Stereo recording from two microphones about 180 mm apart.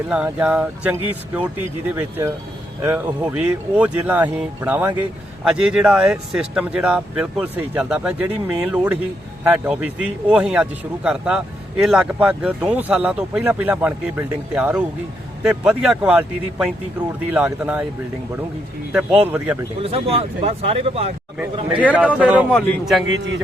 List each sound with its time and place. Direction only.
0.1 s a man's voice: 5° right (ahead or behind)
2.0 s a man's voice: 10° right (ahead or behind)
18.9 s a man's voice: 10° right (ahead or behind)
19.8 s speech: 35° right (ahead or behind)
22.2 s speech: 5° right (ahead or behind)
23.0 s a man's voice: 85° right